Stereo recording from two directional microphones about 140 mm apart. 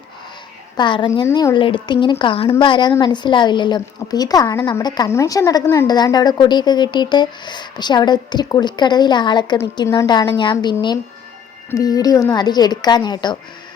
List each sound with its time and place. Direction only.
0.8 s a woman's voice: 35° left (ahead or behind); by 5.9 s 15° left (ahead or behind)
5.9 s a woman's voice: 30° left (ahead or behind)